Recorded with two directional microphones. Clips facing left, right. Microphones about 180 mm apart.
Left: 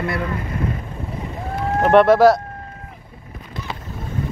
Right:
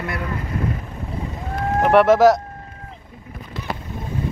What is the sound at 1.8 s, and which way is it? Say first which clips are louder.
Speech: left 1 dB; 10° right (ahead or behind).